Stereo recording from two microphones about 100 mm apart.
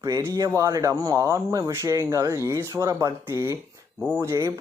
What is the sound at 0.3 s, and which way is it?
Speech, 30° right (ahead or behind).